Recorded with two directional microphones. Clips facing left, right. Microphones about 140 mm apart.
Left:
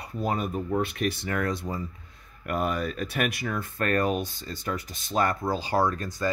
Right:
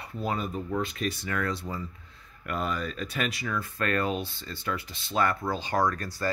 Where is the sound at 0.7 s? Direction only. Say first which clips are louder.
Left 3 dB; 55° left (ahead or behind).